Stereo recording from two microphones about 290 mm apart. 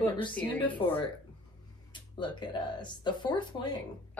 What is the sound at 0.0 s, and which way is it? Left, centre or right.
Speech, centre.